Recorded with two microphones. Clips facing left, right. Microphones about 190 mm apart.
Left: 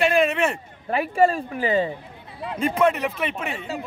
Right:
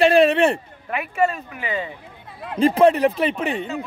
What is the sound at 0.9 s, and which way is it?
Speech, 35° left (ahead or behind).